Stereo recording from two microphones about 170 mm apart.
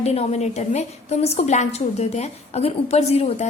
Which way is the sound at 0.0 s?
40° left (ahead or behind).